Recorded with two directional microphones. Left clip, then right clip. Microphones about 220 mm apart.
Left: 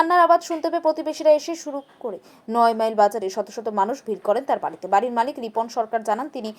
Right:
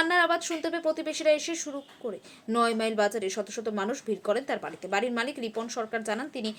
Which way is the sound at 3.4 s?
50° left (ahead or behind).